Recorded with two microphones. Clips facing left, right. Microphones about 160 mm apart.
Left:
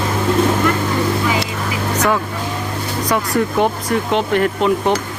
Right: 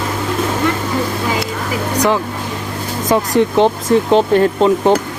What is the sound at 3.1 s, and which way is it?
Speech, 25° right (ahead or behind).